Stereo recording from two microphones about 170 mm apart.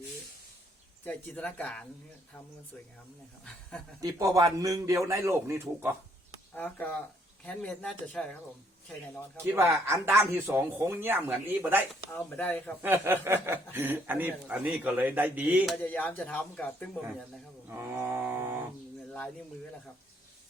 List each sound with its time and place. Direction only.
1.0 s speech: 10° left (ahead or behind)
4.0 s a man's voice: 20° right (ahead or behind)
6.5 s speech: 10° left (ahead or behind)
9.6 s speech: 15° right (ahead or behind)
12.1 s speech: 10° left (ahead or behind)
12.8 s speech: 10° right (ahead or behind)
15.8 s speech: 10° left (ahead or behind)
17.7 s speech: 15° right (ahead or behind)